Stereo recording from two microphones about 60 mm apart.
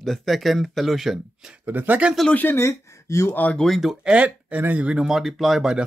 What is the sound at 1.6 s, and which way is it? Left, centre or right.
Speech, right.